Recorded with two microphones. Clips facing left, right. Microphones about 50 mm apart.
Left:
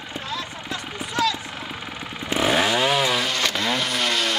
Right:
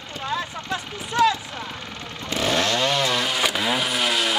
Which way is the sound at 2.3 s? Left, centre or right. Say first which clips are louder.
Left 2 dB; centre.